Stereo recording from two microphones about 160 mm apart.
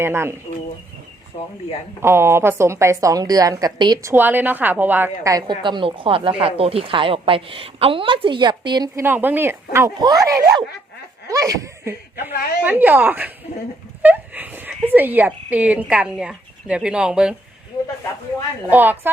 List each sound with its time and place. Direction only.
0.0 s speech: 15° right (ahead or behind)
1.3 s speech: 40° left (ahead or behind)
2.0 s speech: 15° right (ahead or behind)
4.1 s a woman's voice: 10° right (ahead or behind); by 8.9 s 25° right (ahead or behind)
9.0 s speech: 10° right (ahead or behind)
18.7 s speech: 10° right (ahead or behind)